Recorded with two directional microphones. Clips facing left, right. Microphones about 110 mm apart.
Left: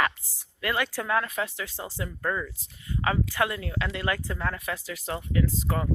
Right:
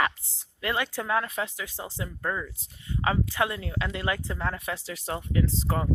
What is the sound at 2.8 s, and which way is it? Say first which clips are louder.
Speech: even; 25° right (ahead or behind).